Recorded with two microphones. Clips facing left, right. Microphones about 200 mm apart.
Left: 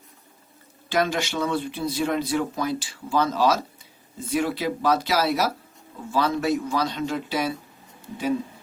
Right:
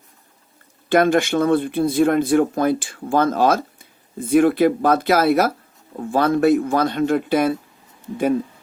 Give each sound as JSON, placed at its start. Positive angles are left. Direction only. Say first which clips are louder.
{"t": 0.9, "sound": "speech", "louder": "right 8 dB", "side_deg": -55}